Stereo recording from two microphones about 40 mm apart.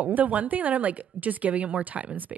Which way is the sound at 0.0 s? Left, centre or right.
Right.